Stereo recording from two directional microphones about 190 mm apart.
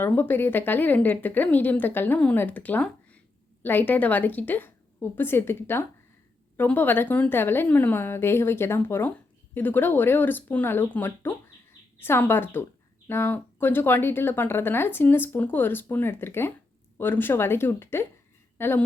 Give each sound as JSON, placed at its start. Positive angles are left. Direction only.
{"t": 0.0, "sound": "a woman's voice", "side_deg": 10}